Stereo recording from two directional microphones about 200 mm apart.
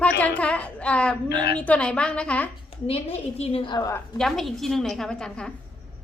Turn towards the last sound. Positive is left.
turn(degrees=5)  # may be behind; listen again after turning